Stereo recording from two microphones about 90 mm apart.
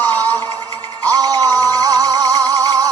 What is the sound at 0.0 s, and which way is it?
Music, 20° left (ahead or behind).